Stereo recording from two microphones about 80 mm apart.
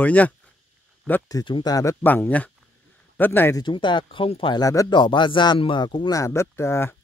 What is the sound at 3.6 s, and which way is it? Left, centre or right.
Speech, left.